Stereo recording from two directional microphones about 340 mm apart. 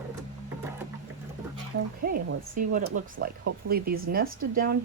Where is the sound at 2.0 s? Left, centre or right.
Right.